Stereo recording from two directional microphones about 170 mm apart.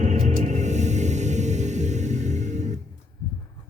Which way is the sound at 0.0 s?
45° right (ahead or behind).